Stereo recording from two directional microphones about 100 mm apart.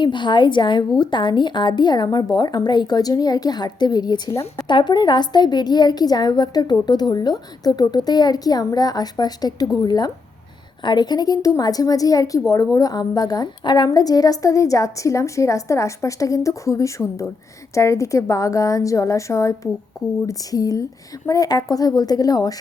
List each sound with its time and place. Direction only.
0.0 s a woman's voice: 50° left (ahead or behind)